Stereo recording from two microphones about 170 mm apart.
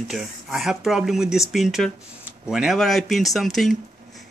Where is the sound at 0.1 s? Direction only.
5° right (ahead or behind).